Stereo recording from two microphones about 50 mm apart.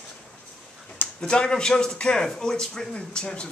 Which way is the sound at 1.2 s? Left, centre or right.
Centre.